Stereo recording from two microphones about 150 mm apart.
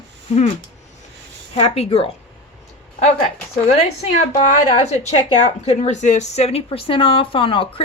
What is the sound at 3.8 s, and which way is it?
A woman's voice, 45° left (ahead or behind).